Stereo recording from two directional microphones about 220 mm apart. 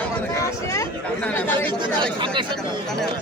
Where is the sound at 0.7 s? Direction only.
10° left (ahead or behind).